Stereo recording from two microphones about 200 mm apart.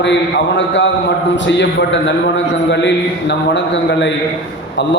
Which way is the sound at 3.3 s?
65° left (ahead or behind).